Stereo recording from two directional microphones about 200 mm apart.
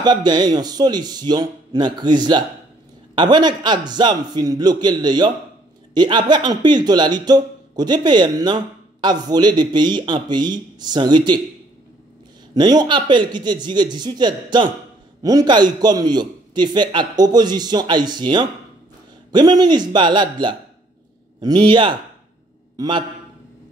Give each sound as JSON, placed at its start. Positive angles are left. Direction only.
{"t": 0.0, "sound": "speech", "side_deg": -20}
{"t": 12.5, "sound": "speech", "side_deg": -20}